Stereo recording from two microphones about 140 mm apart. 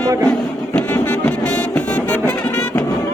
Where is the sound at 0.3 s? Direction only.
10° left (ahead or behind).